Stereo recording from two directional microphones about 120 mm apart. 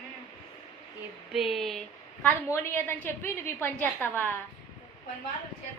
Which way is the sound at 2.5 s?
15° left (ahead or behind).